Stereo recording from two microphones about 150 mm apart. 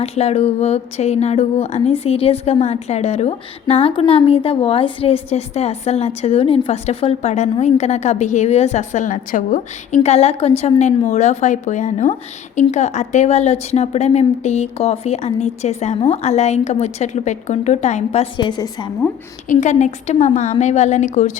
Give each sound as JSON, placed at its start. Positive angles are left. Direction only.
{"t": 0.0, "sound": "speech", "side_deg": 45}
{"t": 18.3, "sound": "a woman's voice", "side_deg": 30}
{"t": 19.5, "sound": "speech", "side_deg": 50}